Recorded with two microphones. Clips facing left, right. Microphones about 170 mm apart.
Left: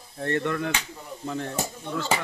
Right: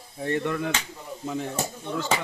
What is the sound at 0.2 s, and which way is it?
Speech, 10° right (ahead or behind).